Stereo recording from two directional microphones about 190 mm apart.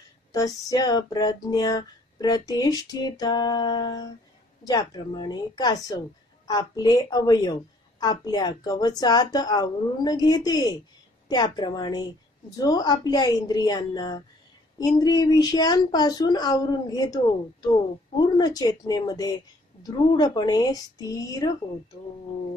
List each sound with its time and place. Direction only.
0.3 s speech: 20° left (ahead or behind)